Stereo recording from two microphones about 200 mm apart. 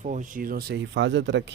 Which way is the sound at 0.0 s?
40° right (ahead or behind).